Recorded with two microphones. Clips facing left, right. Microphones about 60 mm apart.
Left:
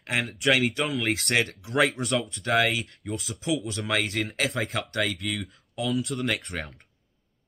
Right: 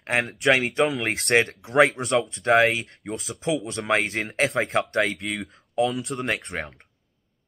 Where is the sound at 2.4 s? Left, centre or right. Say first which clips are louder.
Right 5 dB; right.